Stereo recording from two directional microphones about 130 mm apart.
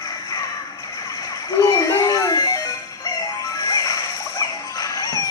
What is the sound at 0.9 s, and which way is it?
Music, 30° left (ahead or behind).